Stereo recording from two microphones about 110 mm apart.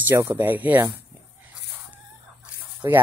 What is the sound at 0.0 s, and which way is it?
Speech, 20° right (ahead or behind).